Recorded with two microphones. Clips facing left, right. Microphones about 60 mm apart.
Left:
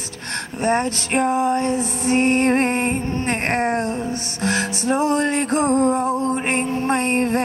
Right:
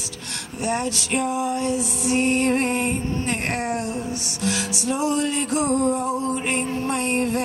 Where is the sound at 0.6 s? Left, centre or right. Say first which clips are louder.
Left 5 dB; left.